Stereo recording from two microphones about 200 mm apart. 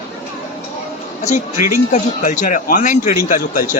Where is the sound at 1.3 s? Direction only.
40° left (ahead or behind).